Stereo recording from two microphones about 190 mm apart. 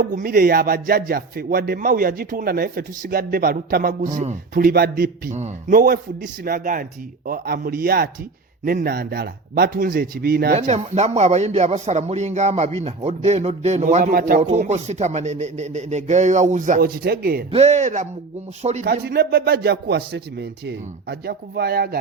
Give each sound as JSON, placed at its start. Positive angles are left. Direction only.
{"t": 0.0, "sound": "speech", "side_deg": -45}
{"t": 10.5, "sound": "a man's voice", "side_deg": -35}
{"t": 14.4, "sound": "a man's voice", "side_deg": -35}
{"t": 17.5, "sound": "a man's voice", "side_deg": -35}
{"t": 18.9, "sound": "a man's voice", "side_deg": -55}